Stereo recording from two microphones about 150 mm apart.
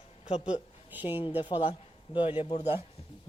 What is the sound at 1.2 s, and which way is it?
A man's voice, 35° left (ahead or behind).